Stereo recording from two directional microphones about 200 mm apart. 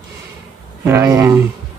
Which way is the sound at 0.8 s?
15° right (ahead or behind).